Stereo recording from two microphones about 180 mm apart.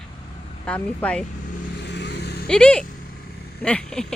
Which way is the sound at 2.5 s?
5° left (ahead or behind).